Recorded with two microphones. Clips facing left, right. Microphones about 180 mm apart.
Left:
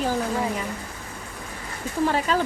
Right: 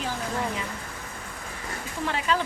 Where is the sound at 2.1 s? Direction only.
40° left (ahead or behind).